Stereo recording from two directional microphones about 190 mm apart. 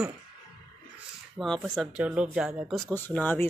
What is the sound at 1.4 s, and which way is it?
Speech, centre (ahead or behind).